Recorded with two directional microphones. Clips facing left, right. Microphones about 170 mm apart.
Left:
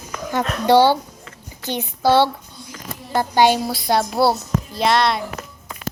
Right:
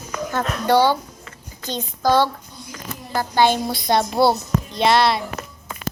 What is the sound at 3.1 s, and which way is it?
Speech, 25° left (ahead or behind).